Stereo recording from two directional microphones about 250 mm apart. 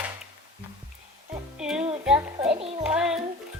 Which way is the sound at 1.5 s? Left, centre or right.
Centre.